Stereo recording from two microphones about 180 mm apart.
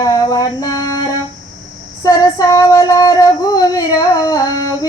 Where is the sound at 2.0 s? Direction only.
20° left (ahead or behind).